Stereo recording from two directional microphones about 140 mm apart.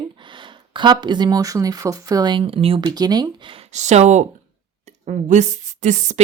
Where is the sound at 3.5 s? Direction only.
55° right (ahead or behind).